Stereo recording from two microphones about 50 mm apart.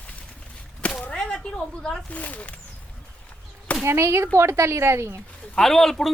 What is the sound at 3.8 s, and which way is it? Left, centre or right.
Speech, right.